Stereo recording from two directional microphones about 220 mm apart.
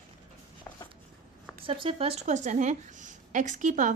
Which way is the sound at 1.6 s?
25° right (ahead or behind).